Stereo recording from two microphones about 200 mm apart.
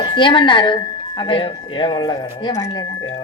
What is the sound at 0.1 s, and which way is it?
Speech, 25° left (ahead or behind).